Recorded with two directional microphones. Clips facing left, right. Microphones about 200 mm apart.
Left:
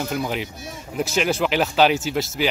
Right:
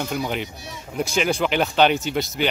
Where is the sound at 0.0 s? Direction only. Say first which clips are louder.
Left 1 dB; centre (ahead or behind).